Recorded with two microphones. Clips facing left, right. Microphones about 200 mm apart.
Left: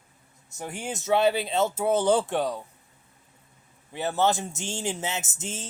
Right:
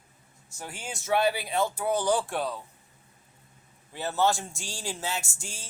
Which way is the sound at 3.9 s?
15° left (ahead or behind).